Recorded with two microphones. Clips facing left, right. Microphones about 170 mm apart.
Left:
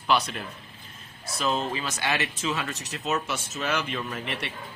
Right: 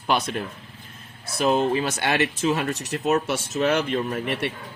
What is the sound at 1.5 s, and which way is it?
Speech, 55° right (ahead or behind).